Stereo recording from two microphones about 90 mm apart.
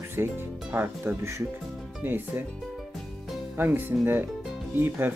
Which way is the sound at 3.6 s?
25° right (ahead or behind).